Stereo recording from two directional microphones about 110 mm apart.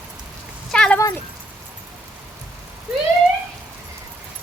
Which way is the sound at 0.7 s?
5° left (ahead or behind).